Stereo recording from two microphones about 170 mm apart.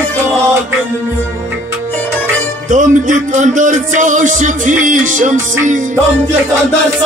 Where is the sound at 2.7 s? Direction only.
50° right (ahead or behind).